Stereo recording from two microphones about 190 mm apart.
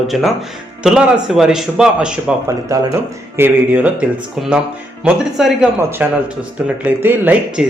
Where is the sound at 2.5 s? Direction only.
15° right (ahead or behind).